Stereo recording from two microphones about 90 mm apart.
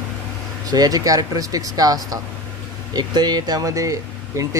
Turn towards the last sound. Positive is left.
turn(degrees=-35)  # may be behind; listen again after turning